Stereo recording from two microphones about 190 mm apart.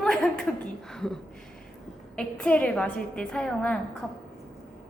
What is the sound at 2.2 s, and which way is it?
A woman's voice, 5° left (ahead or behind).